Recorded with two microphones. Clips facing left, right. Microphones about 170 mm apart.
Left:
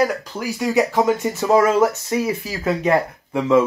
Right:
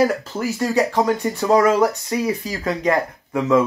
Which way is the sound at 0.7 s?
20° left (ahead or behind).